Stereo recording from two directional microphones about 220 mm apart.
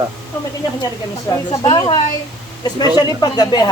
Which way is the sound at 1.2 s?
20° left (ahead or behind).